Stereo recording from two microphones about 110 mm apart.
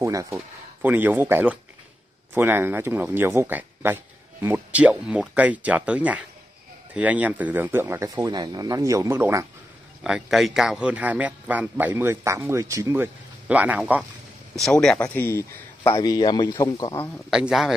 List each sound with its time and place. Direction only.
0.0 s speech: 30° right (ahead or behind)
0.8 s speech: 15° right (ahead or behind)
8.1 s speech: 35° right (ahead or behind)
10.0 s speech: 5° right (ahead or behind); by 12.9 s 30° right (ahead or behind)
12.9 s speech: 15° right (ahead or behind)
14.6 s speech: 5° left (ahead or behind)
15.9 s speech: 40° left (ahead or behind)
17.3 s a man's voice: 5° right (ahead or behind)